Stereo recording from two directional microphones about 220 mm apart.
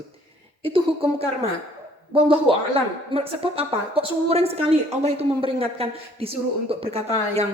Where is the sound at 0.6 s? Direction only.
25° right (ahead or behind).